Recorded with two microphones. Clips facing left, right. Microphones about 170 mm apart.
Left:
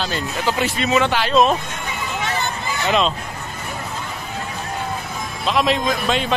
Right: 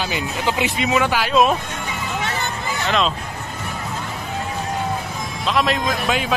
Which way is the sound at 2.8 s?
Centre (ahead or behind).